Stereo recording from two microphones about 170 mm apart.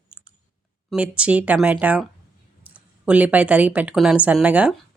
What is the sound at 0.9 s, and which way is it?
A woman's voice, 5° right (ahead or behind).